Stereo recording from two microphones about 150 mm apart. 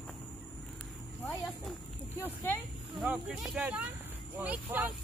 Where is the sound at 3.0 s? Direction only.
5° right (ahead or behind).